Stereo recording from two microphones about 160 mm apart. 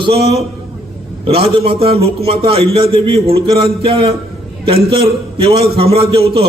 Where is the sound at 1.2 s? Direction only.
40° right (ahead or behind).